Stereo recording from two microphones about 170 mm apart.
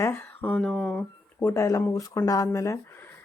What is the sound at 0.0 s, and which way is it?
Speech, 10° left (ahead or behind).